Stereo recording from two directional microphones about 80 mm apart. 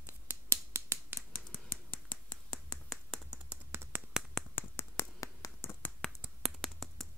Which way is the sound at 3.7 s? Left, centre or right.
Right.